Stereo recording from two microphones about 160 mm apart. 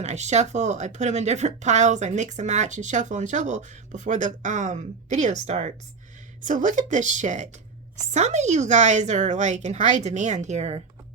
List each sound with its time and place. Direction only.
0.0 s speech: 45° right (ahead or behind)